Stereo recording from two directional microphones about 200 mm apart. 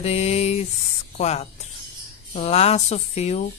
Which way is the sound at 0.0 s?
30° left (ahead or behind).